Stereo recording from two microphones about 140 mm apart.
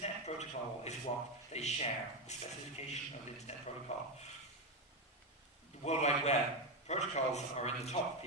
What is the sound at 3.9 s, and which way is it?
Speech, 50° left (ahead or behind).